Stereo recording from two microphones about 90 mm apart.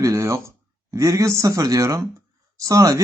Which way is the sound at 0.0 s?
35° right (ahead or behind).